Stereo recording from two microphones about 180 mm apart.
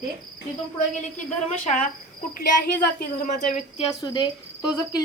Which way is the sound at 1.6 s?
45° left (ahead or behind).